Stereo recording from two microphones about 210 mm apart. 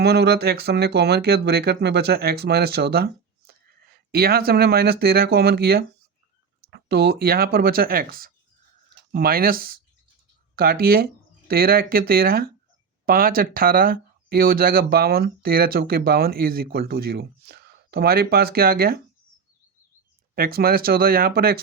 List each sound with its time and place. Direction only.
0.0 s speech: 50° right (ahead or behind)
20.3 s speech: 45° right (ahead or behind)